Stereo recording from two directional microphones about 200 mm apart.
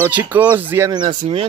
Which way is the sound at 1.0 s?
30° right (ahead or behind).